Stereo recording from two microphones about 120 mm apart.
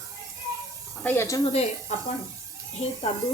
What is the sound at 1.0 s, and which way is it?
Speech, 20° left (ahead or behind).